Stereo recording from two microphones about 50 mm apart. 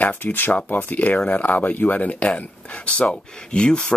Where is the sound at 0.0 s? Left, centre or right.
Left.